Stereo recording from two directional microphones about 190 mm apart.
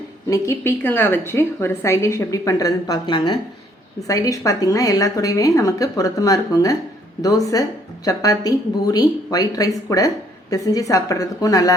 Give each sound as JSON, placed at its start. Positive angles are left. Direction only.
{"t": 0.3, "sound": "a woman's voice", "side_deg": 15}